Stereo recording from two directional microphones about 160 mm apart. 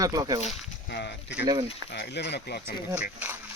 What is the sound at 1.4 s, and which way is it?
Speech, 30° right (ahead or behind).